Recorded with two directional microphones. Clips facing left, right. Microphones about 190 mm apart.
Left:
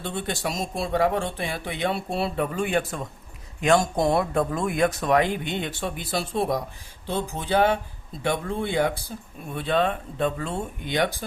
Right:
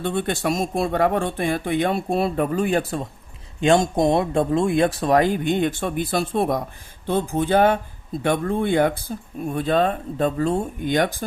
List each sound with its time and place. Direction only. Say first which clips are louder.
0.0 s speech: right 6 dB; 55° right (ahead or behind); by 3.1 s 35° right (ahead or behind)
3.6 s speech: right 3 dB; 25° right (ahead or behind); by 11.1 s 45° right (ahead or behind)